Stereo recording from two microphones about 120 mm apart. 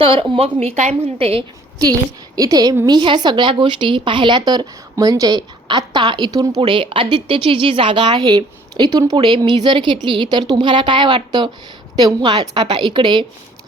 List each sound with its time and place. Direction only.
0.0 s a woman's voice: 45° right (ahead or behind)
2.3 s a woman's voice: 30° right (ahead or behind)
6.6 s a woman's voice: 45° right (ahead or behind)
8.9 s speech: 25° right (ahead or behind)
9.1 s a woman's voice: 40° right (ahead or behind)